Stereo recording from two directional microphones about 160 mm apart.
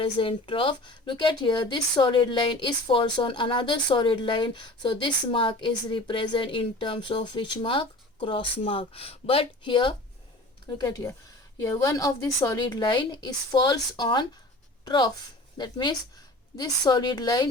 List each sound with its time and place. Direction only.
0.0 s a woman's voice: 35° left (ahead or behind)